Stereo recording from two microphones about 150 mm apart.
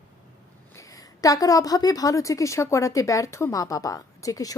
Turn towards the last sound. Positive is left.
turn(degrees=25)  # may be behind; listen again after turning